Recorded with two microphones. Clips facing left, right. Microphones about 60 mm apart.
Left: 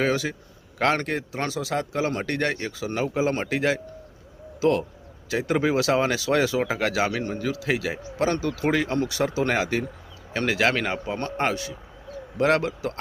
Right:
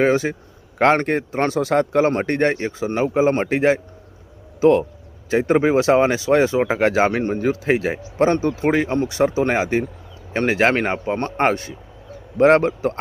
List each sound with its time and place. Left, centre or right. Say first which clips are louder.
0.0 s a man's voice: right 7 dB; right